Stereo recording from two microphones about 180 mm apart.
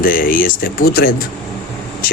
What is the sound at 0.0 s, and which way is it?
Speech, 50° left (ahead or behind).